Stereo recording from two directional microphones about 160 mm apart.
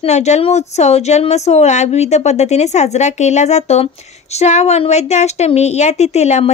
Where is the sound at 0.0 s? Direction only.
45° left (ahead or behind).